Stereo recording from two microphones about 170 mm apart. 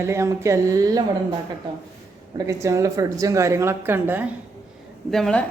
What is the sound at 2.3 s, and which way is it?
A woman's voice, 20° right (ahead or behind).